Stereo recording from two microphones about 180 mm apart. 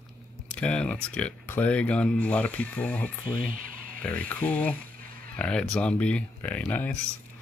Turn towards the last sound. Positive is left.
turn(degrees=10)  # may be behind; listen again after turning